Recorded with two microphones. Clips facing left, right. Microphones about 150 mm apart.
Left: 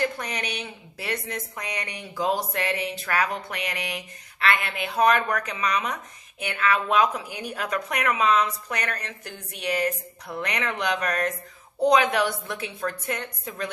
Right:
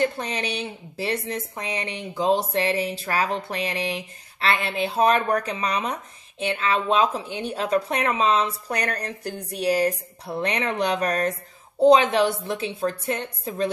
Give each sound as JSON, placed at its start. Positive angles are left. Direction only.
{"t": 0.0, "sound": "a woman's voice", "side_deg": -30}